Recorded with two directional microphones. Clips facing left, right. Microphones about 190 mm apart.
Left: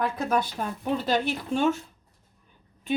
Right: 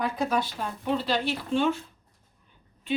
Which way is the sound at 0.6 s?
45° left (ahead or behind).